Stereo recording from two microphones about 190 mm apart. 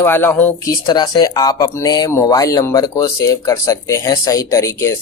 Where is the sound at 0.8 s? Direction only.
20° left (ahead or behind).